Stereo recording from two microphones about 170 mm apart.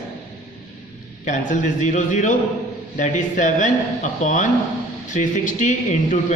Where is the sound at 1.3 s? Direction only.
45° left (ahead or behind).